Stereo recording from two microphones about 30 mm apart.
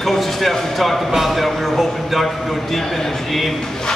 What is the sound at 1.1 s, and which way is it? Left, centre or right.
Speech, centre.